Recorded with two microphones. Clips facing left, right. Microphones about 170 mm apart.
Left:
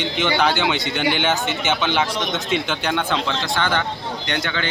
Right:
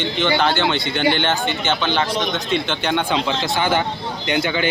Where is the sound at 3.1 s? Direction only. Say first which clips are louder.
Right 2 dB; 10° right (ahead or behind).